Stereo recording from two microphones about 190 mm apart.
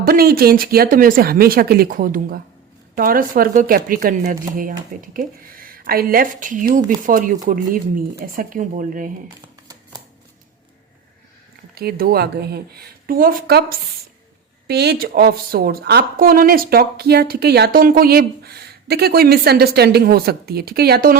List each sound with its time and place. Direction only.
0.0 s speech: 55° right (ahead or behind)
11.7 s speech: 55° right (ahead or behind)